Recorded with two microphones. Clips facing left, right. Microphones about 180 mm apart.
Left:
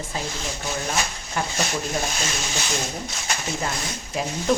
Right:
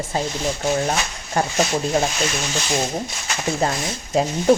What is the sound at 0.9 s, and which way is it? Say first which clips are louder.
Speech: right 3 dB; 45° right (ahead or behind).